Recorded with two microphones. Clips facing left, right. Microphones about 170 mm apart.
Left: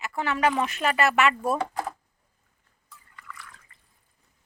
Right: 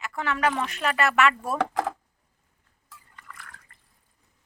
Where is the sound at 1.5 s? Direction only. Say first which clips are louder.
Right 3 dB; 85° right.